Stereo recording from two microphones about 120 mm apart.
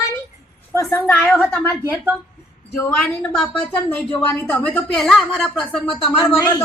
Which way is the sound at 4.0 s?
5° left (ahead or behind).